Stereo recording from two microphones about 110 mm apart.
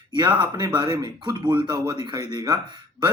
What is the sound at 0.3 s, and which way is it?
A man's voice, 45° right (ahead or behind).